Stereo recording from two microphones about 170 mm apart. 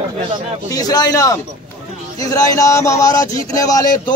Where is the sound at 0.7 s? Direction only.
20° left (ahead or behind).